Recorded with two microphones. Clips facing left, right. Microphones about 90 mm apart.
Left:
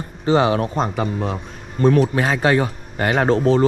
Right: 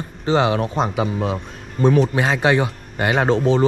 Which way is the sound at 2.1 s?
20° right (ahead or behind).